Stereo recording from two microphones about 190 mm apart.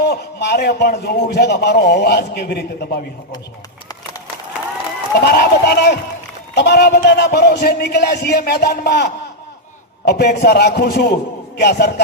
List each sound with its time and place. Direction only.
0.0 s a man's voice: 60° left (ahead or behind)
5.1 s a man's voice: 55° left (ahead or behind)